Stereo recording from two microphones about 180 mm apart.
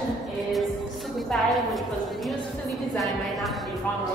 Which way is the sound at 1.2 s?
Centre (ahead or behind).